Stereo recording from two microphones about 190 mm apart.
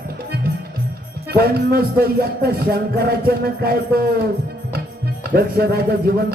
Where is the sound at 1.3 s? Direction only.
55° right (ahead or behind).